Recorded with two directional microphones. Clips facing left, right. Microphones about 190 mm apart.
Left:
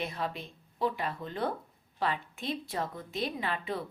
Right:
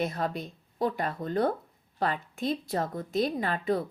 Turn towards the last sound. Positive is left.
turn(degrees=-45)  # may be behind; listen again after turning